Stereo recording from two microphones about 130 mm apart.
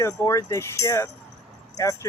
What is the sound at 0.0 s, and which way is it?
Speech, 25° left (ahead or behind).